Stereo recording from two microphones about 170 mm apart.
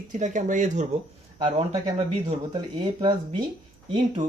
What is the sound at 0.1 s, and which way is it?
Speech, 45° right (ahead or behind).